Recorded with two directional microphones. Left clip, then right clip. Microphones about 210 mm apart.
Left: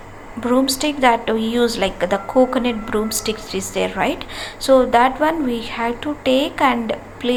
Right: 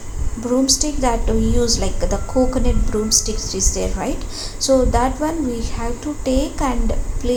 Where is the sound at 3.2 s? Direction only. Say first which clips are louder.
Even; 55° left (ahead or behind).